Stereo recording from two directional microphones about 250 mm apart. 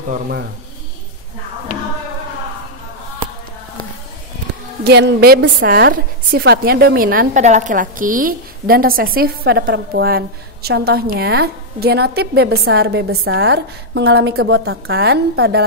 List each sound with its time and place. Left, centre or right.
4.8 s a woman's voice: right